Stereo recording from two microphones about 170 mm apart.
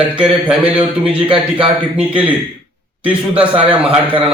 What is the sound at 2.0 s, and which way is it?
A man's voice, 10° right (ahead or behind).